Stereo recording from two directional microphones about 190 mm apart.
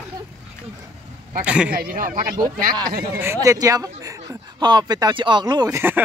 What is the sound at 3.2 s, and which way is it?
Speech, 15° right (ahead or behind).